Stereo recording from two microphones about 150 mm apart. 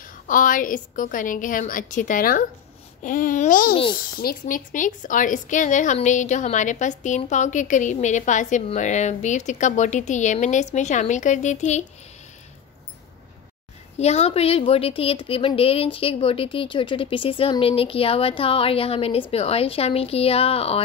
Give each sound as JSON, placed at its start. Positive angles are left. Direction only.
{"t": 0.0, "sound": "a woman's voice", "side_deg": 65}
{"t": 4.2, "sound": "a woman's voice", "side_deg": 75}
{"t": 13.9, "sound": "a woman's voice", "side_deg": 45}